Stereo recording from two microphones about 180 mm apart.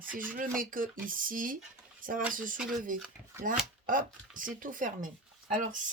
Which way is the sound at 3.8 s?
50° right (ahead or behind).